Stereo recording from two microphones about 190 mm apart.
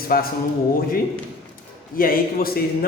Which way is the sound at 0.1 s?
50° left (ahead or behind).